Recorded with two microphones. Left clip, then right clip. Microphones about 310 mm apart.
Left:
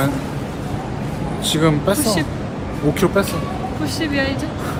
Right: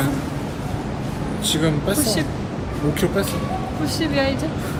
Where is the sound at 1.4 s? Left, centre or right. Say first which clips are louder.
Left 4 dB; centre.